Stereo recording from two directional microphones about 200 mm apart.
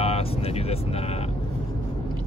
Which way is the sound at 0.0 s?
30° left (ahead or behind).